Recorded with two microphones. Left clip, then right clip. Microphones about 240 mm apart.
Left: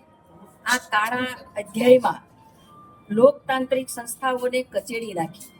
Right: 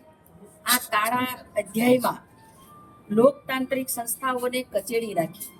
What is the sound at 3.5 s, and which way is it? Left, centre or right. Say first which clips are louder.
A woman's voice: left 4 dB; centre.